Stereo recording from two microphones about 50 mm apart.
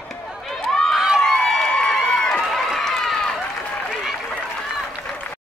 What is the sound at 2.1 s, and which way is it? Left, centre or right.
Run, centre.